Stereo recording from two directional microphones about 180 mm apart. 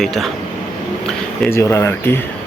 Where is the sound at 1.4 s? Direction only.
15° left (ahead or behind).